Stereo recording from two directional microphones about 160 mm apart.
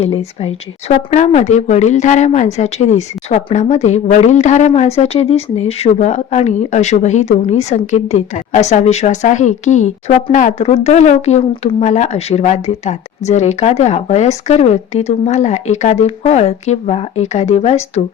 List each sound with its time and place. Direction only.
0.0 s speech: 40° left (ahead or behind)